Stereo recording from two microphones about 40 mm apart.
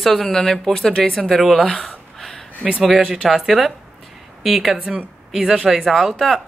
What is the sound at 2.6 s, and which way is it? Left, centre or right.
Speech, centre.